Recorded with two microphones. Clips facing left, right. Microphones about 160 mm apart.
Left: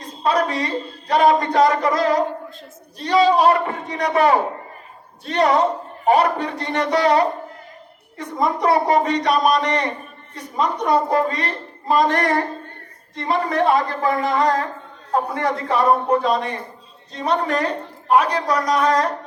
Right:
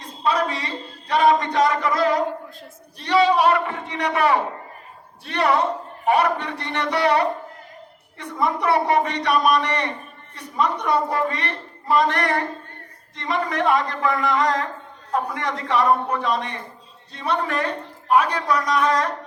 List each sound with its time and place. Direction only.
0.3 s a woman's voice: 35° left (ahead or behind)